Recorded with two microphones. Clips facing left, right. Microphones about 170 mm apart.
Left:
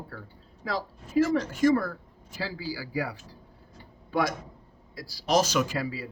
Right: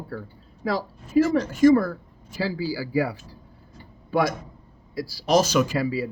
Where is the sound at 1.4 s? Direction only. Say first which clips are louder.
Right 6 dB; 90° right.